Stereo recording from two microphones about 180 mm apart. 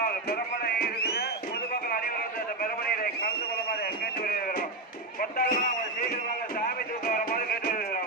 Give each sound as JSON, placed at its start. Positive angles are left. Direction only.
{"t": 0.0, "sound": "music", "side_deg": 60}
{"t": 4.2, "sound": "music", "side_deg": 55}
{"t": 5.2, "sound": "a sound", "side_deg": 50}
{"t": 6.6, "sound": "music", "side_deg": 55}